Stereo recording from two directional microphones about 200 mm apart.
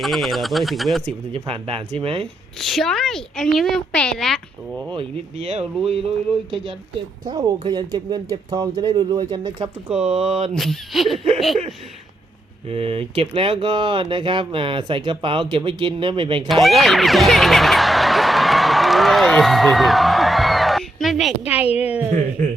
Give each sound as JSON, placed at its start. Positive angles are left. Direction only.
{"t": 0.0, "sound": "a woman's voice", "side_deg": 0}
{"t": 1.0, "sound": "speech", "side_deg": -25}
{"t": 2.6, "sound": "a woman's voice", "side_deg": 0}
{"t": 4.8, "sound": "speech", "side_deg": -25}
{"t": 7.3, "sound": "speech", "side_deg": -20}
{"t": 10.5, "sound": "a woman's voice", "side_deg": 0}
{"t": 11.3, "sound": "snicker", "side_deg": 0}
{"t": 12.6, "sound": "speech", "side_deg": -30}
{"t": 16.5, "sound": "music", "side_deg": 0}
{"t": 21.8, "sound": "a woman's voice", "side_deg": -5}